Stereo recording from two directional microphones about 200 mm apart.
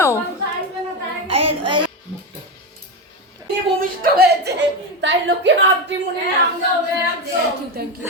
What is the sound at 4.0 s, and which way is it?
Speech, 50° right (ahead or behind).